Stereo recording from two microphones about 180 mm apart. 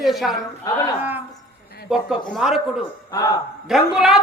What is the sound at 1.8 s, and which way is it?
Speech, centre (ahead or behind).